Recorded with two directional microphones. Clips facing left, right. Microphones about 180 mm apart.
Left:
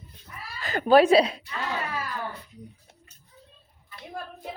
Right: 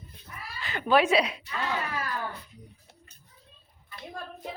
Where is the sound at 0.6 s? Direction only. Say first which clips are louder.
Left 6 dB; 40° left (ahead or behind).